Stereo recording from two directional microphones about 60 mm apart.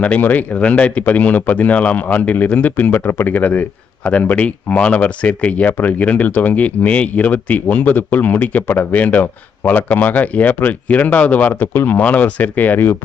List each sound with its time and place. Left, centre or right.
0.0 s speech: left
11.7 s speech: left